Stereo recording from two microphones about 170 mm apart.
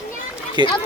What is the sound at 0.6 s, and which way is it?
Speech, 25° right (ahead or behind).